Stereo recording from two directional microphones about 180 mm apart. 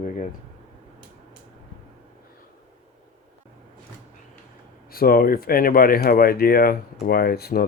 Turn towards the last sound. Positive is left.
turn(degrees=60)  # may be behind; listen again after turning